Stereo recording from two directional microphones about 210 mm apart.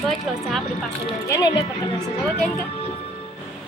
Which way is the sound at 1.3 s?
15° left (ahead or behind).